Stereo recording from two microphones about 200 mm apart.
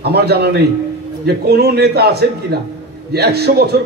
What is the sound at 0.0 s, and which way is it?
A man's voice, 55° right (ahead or behind).